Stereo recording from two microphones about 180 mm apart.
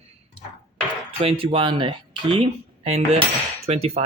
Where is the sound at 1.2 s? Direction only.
30° right (ahead or behind).